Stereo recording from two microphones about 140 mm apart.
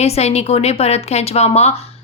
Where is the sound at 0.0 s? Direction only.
50° left (ahead or behind).